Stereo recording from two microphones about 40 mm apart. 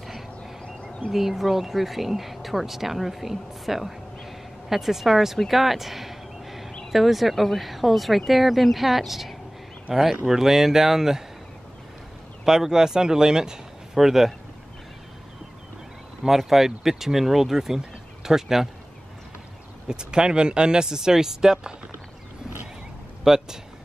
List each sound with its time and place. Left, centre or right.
1.1 s speech: centre
5.4 s a sound: centre
6.9 s speech: centre
9.8 s speech: centre
12.4 s speech: centre
16.2 s speech: centre
19.9 s speech: centre
23.2 s speech: centre